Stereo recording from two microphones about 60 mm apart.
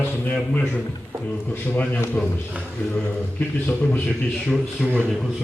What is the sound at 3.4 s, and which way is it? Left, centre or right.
Speech, left.